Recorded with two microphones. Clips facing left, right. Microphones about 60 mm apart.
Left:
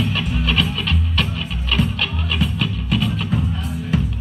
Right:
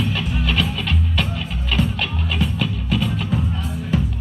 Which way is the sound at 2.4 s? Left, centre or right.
Centre.